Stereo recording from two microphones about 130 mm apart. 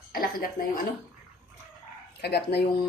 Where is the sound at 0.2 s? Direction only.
90° left.